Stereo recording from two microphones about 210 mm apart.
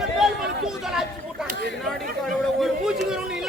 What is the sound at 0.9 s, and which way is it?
Chatter, centre (ahead or behind).